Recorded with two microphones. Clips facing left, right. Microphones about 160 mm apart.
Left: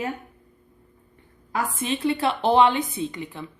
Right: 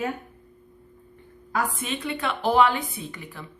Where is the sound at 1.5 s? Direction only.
30° left (ahead or behind).